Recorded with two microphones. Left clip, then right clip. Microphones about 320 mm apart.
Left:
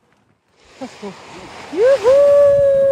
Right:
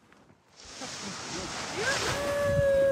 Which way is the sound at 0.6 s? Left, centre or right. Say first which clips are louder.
Left 8 dB; left.